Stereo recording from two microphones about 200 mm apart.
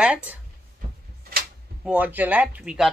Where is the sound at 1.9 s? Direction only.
10° right (ahead or behind).